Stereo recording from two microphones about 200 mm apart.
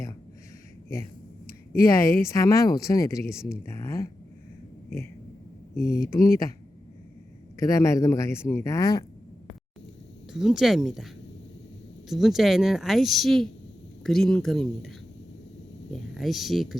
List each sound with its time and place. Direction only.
1.8 s speech: 15° left (ahead or behind)
5.7 s speech: 50° left (ahead or behind)
7.6 s speech: 15° left (ahead or behind)
10.3 s speech: centre (ahead or behind)